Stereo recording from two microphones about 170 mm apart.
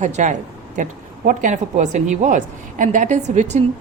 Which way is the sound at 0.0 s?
45° right (ahead or behind).